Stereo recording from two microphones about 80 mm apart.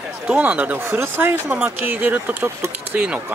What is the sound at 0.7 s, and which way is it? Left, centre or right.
Speech, right.